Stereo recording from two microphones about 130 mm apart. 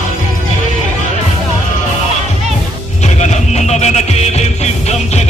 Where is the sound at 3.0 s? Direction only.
60° left (ahead or behind).